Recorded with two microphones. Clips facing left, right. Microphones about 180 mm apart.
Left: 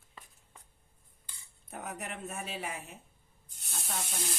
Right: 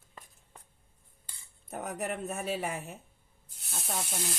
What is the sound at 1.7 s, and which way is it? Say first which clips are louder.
Speech: right 6 dB; 45° right (ahead or behind).